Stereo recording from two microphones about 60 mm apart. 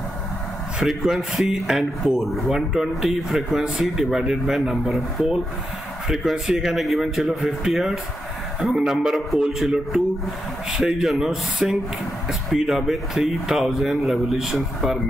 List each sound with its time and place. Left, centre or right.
0.7 s speech: centre
6.0 s a man's voice: centre